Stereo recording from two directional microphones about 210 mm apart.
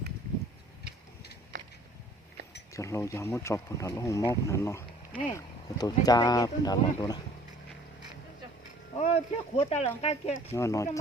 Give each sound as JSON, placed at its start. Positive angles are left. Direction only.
{"t": 2.7, "sound": "speech", "side_deg": 15}
{"t": 9.0, "sound": "speech", "side_deg": 30}
{"t": 10.5, "sound": "speech", "side_deg": 15}